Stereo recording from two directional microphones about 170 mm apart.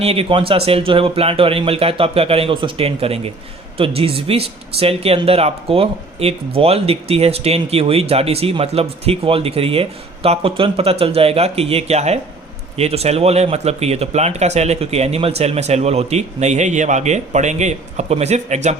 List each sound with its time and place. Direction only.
0.0 s speech: 35° right (ahead or behind)